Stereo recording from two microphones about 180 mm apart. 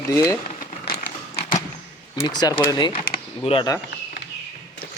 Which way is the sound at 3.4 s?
35° left (ahead or behind).